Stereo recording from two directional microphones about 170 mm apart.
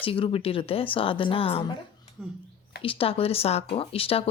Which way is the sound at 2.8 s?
30° left (ahead or behind).